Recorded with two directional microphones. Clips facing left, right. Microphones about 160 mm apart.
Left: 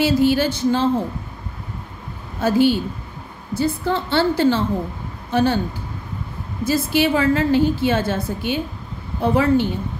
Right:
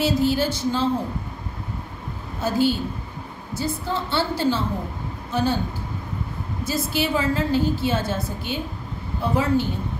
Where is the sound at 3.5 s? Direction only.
60° left (ahead or behind).